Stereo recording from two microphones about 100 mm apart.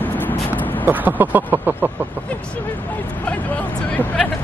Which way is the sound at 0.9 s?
20° right (ahead or behind).